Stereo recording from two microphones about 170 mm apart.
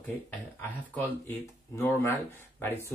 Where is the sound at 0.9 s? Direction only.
10° left (ahead or behind).